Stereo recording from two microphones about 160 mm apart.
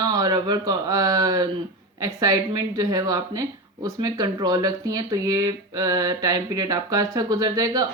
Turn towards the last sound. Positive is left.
turn(degrees=-25)  # may be behind; listen again after turning